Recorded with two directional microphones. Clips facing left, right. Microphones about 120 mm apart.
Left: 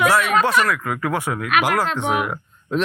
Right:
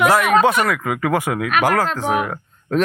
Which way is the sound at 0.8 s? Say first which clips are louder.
Right 4 dB; 75° right (ahead or behind).